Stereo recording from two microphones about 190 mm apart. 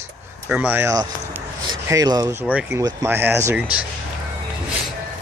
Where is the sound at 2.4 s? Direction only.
10° right (ahead or behind).